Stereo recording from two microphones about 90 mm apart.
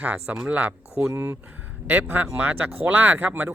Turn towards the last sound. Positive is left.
turn(degrees=-20)  # may be behind; listen again after turning